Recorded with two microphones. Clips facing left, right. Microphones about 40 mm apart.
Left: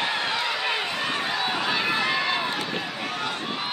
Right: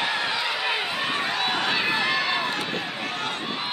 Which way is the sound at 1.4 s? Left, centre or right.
Right.